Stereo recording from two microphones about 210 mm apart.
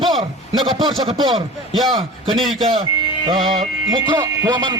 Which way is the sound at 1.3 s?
Centre (ahead or behind).